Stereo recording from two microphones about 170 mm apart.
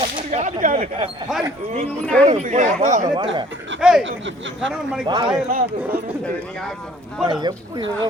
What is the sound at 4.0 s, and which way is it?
Speech, 90° right.